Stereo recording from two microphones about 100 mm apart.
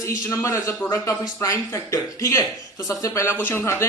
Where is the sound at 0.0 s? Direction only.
30° left (ahead or behind).